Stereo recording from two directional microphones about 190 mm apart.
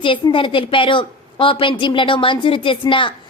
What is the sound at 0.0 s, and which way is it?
A woman's voice, 25° left (ahead or behind).